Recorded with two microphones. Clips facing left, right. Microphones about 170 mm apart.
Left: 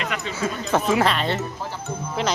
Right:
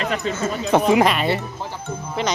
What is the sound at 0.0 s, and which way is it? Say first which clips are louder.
Speech: right 5 dB; 35° right (ahead or behind).